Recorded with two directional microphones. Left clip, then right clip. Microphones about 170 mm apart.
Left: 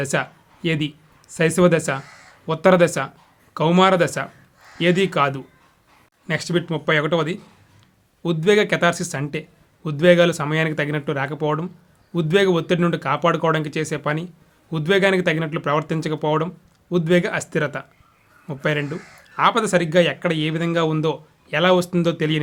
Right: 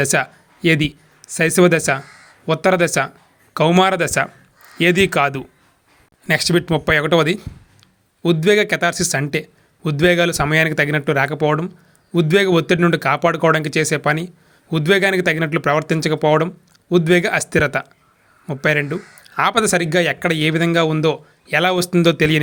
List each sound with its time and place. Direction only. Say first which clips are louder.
0.0 s speech: right 5 dB; 20° right (ahead or behind)